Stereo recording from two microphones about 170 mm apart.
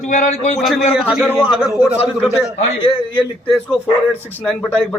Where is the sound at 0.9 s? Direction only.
5° right (ahead or behind).